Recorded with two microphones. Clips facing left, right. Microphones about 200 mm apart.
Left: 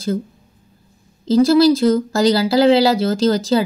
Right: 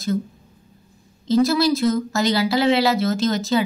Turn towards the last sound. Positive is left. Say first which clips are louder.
# left 4 dB
turn(degrees=30)  # may be behind; listen again after turning